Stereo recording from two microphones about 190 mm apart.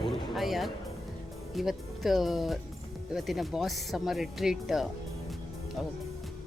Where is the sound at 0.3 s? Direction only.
Centre (ahead or behind).